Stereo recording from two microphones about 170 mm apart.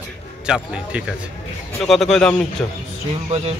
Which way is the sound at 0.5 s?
5° right (ahead or behind).